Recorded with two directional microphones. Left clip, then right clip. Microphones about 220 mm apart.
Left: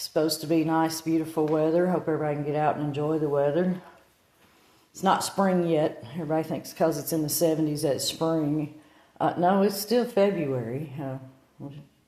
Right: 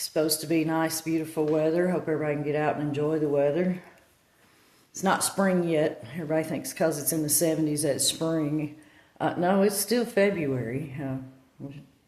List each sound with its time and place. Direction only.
0.0 s speech: centre (ahead or behind)
3.3 s speech: 20° left (ahead or behind)
4.9 s speech: centre (ahead or behind)